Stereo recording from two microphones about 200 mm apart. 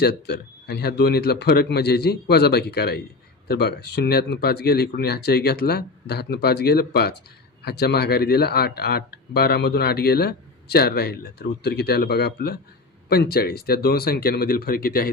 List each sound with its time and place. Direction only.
0.0 s speech: 55° left (ahead or behind)